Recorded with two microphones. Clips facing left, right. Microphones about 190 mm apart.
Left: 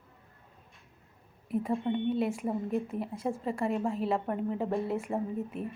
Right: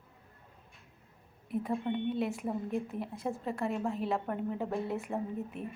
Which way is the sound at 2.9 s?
5° right (ahead or behind).